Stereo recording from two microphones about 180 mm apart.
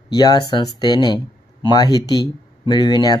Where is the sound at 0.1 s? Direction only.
20° left (ahead or behind).